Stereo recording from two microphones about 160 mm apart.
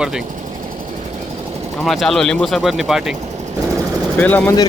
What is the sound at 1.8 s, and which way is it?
Speech, centre (ahead or behind).